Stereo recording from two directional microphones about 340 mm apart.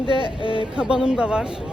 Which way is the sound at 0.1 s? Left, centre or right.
Centre.